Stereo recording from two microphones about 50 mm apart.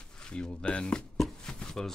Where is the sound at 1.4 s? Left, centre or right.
Centre.